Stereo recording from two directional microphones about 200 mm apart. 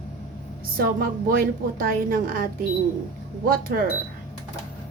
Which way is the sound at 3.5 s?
45° right (ahead or behind).